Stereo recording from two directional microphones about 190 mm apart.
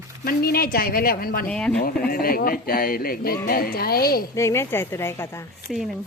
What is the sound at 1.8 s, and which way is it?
Speech, 50° left (ahead or behind).